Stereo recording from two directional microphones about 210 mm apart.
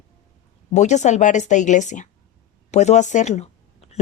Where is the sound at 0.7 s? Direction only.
35° left (ahead or behind).